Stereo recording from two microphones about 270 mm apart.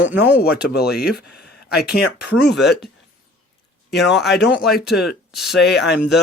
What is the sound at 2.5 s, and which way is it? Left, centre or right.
Speech, centre.